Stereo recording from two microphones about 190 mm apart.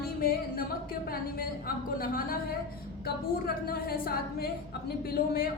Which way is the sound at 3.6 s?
50° left (ahead or behind).